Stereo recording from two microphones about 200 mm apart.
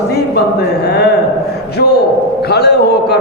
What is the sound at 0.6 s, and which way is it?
A man's voice, 55° left (ahead or behind).